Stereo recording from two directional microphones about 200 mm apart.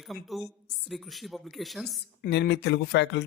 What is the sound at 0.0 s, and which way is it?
A woman's voice, centre (ahead or behind).